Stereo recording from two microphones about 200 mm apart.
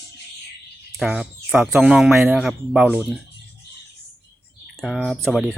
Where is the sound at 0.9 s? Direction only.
5° right (ahead or behind).